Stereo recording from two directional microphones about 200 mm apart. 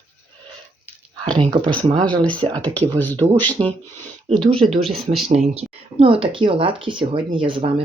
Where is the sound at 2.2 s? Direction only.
5° left (ahead or behind).